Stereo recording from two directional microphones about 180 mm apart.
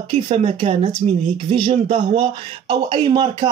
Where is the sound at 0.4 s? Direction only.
30° right (ahead or behind).